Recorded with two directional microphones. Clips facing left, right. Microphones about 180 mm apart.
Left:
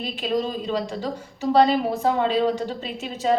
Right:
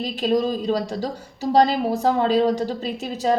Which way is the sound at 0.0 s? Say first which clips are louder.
Right 4 dB; 40° right (ahead or behind).